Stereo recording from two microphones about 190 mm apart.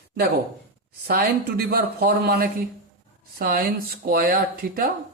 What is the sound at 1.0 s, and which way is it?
Speech, 55° right (ahead or behind).